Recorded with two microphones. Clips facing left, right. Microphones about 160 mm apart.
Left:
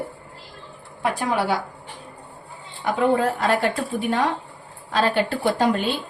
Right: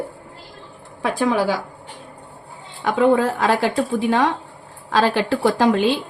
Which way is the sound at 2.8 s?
90° right.